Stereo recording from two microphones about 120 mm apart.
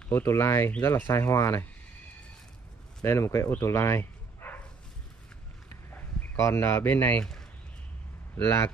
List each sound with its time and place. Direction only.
0.1 s speech: 20° left (ahead or behind)
3.0 s speech: 20° left (ahead or behind)
5.9 s speech: 25° left (ahead or behind)